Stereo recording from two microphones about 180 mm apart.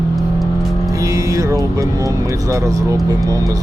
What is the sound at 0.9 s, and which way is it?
Music, 20° right (ahead or behind).